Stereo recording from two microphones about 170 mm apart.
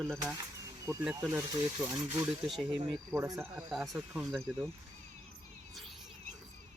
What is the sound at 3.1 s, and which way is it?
Speech, 15° right (ahead or behind).